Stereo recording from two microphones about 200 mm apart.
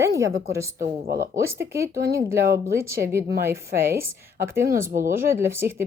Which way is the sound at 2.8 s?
15° right (ahead or behind).